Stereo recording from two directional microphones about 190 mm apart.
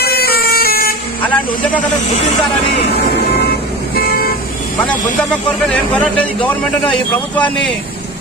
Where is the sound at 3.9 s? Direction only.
50° left (ahead or behind).